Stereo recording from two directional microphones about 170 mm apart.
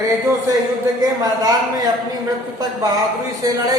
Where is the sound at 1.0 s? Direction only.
20° right (ahead or behind).